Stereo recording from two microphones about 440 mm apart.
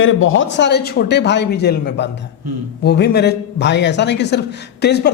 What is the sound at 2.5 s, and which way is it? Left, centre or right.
Speech, right.